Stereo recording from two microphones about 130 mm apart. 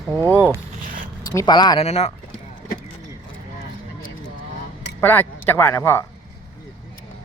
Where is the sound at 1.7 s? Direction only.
55° left (ahead or behind).